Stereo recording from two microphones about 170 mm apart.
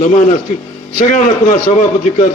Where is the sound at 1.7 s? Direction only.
45° left (ahead or behind).